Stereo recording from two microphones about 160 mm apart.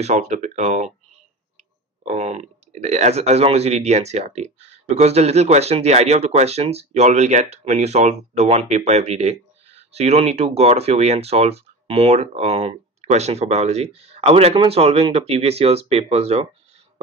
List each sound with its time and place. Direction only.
0.0 s speech: 45° right (ahead or behind)
2.0 s speech: 40° right (ahead or behind)